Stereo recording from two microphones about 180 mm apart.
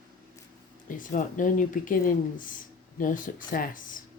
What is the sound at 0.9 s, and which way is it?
Speech, 45° left (ahead or behind).